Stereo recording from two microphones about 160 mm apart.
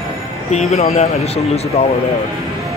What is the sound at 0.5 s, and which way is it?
Speech, 40° left (ahead or behind).